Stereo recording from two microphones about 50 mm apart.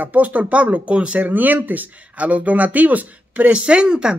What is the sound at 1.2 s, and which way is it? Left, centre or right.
Speech, right.